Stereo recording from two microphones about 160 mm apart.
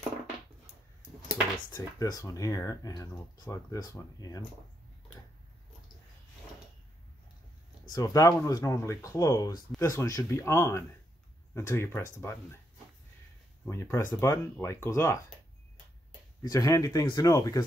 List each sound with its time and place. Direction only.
1.7 s speech: 20° left (ahead or behind)
7.9 s speech: 20° left (ahead or behind)
13.7 s speech: 15° left (ahead or behind)
16.4 s speech: 20° left (ahead or behind)